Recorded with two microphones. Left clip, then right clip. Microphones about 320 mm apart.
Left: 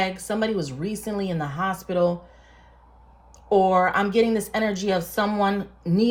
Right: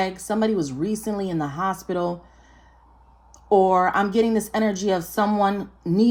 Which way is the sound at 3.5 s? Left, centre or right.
Right.